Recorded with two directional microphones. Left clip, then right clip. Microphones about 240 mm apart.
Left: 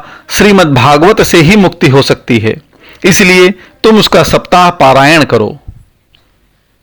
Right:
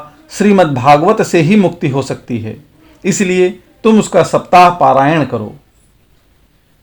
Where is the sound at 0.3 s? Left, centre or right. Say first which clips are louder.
Left 5 dB; left.